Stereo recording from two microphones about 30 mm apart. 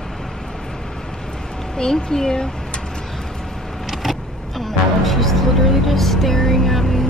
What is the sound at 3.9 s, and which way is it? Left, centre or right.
Vehicle, centre.